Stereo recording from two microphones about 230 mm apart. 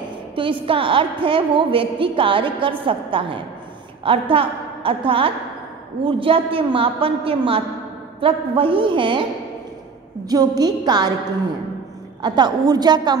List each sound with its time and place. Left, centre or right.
0.4 s a woman's voice: right
10.2 s a woman's voice: centre
12.2 s a woman's voice: centre